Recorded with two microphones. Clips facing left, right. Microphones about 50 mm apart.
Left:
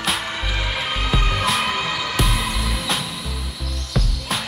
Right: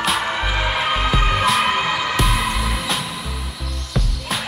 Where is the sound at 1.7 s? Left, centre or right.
Centre.